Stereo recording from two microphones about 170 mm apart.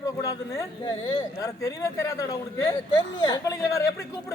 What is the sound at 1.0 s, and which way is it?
Speech, 30° left (ahead or behind).